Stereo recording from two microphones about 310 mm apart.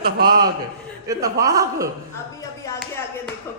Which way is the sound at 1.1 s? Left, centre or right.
Centre.